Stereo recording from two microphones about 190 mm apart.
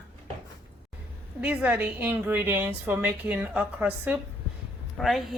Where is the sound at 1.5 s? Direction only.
10° right (ahead or behind).